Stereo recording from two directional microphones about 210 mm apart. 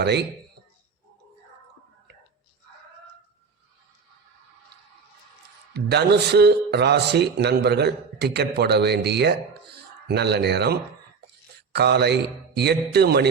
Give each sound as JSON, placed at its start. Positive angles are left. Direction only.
{"t": 0.0, "sound": "speech", "side_deg": -50}
{"t": 5.7, "sound": "speech", "side_deg": -50}